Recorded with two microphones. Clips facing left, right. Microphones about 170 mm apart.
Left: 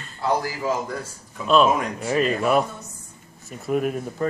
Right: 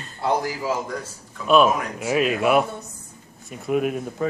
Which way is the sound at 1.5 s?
5° right (ahead or behind).